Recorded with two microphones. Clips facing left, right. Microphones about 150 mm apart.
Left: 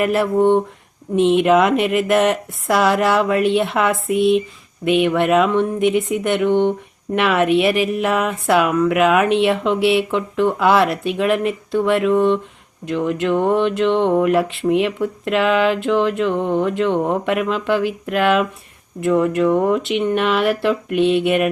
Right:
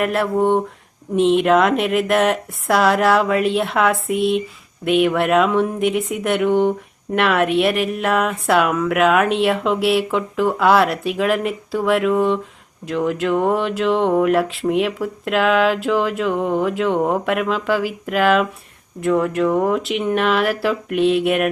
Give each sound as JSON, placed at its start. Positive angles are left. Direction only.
{"t": 0.0, "sound": "speech", "side_deg": 0}